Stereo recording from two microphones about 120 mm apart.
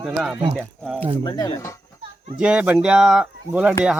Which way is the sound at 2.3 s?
10° right (ahead or behind).